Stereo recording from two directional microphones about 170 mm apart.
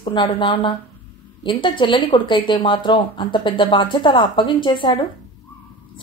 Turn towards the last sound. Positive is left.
turn(degrees=30)  # may be behind; listen again after turning